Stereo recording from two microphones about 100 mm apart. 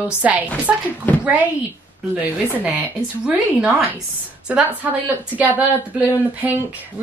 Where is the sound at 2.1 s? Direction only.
15° right (ahead or behind).